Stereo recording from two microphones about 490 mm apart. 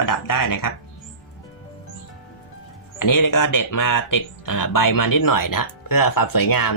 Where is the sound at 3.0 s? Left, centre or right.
Left.